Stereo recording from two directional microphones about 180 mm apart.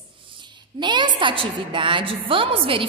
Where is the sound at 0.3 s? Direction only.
25° right (ahead or behind).